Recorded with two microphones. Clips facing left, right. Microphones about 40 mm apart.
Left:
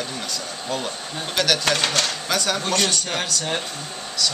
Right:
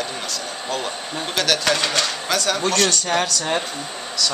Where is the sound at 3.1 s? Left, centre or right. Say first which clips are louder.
Right 4 dB; right.